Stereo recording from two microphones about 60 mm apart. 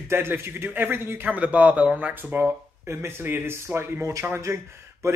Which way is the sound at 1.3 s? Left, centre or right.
Right.